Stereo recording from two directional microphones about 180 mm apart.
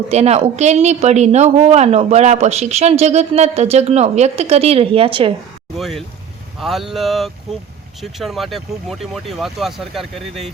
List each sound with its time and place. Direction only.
0.1 s speech: 35° right (ahead or behind)
5.7 s speech: centre (ahead or behind)